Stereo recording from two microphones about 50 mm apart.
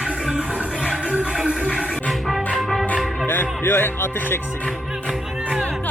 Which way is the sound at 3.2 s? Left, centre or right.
Left.